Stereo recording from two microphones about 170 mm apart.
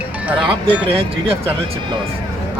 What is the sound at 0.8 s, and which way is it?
Speech, 35° right (ahead or behind).